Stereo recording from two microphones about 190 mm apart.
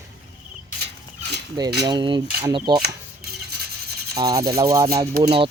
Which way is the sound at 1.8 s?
25° right (ahead or behind).